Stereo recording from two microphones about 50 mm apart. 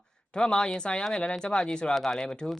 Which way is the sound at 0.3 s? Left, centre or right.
Centre.